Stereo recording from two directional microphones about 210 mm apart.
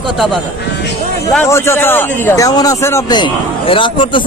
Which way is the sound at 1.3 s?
10° left (ahead or behind).